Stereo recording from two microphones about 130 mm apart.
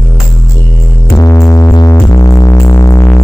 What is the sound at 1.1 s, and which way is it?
Music, 25° left (ahead or behind).